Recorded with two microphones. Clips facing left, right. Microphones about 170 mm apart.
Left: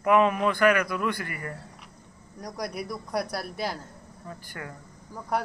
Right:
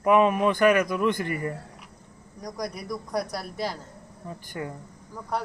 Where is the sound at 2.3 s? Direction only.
5° left (ahead or behind).